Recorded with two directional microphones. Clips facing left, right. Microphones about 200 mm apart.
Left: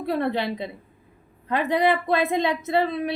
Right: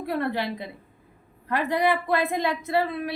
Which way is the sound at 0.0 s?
20° left (ahead or behind).